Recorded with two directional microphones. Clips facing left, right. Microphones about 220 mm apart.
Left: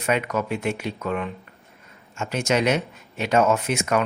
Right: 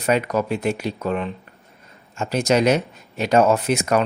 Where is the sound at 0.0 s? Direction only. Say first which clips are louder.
Right 4 dB; 35° right (ahead or behind).